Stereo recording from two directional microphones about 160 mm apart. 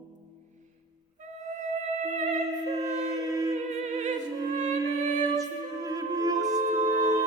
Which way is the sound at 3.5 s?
45° right (ahead or behind).